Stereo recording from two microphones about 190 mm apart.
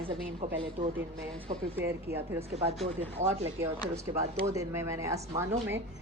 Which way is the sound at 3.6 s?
15° right (ahead or behind).